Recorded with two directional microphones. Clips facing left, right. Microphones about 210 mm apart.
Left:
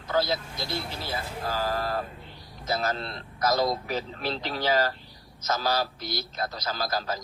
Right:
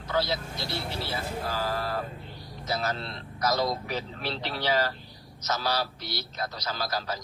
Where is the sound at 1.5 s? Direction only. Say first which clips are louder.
Left 4 dB; 45° left (ahead or behind).